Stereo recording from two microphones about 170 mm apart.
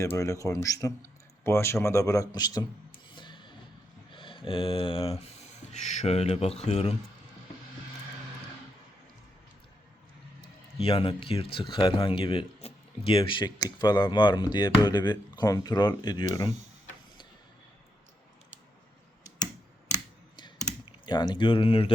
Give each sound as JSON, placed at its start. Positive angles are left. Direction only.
{"t": 0.0, "sound": "speech", "side_deg": 15}
{"t": 3.1, "sound": "music", "side_deg": 30}
{"t": 4.1, "sound": "speech", "side_deg": 30}
{"t": 10.8, "sound": "speech", "side_deg": 35}
{"t": 20.3, "sound": "typing", "side_deg": 25}